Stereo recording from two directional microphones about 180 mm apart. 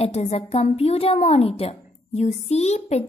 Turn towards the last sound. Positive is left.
turn(degrees=35)  # may be behind; listen again after turning